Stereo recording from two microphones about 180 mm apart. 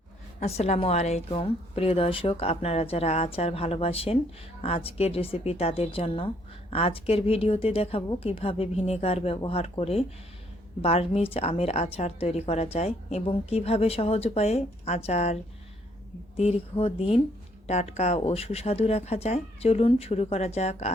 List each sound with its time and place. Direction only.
0.3 s speech: 35° left (ahead or behind)
16.4 s speech: 35° left (ahead or behind)